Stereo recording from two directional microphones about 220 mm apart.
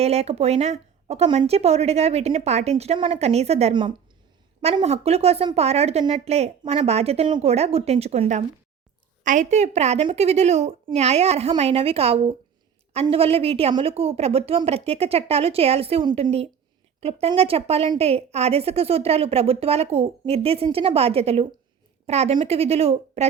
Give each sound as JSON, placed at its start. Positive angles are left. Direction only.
{"t": 0.0, "sound": "a woman's voice", "side_deg": -30}